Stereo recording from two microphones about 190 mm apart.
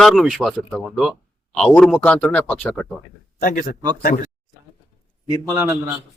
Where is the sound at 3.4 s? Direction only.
45° left (ahead or behind).